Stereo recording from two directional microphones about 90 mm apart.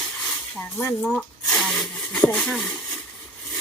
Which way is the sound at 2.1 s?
15° left (ahead or behind).